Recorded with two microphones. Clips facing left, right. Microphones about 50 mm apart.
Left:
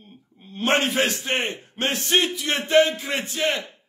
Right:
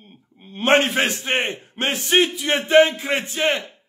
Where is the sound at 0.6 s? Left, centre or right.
Right.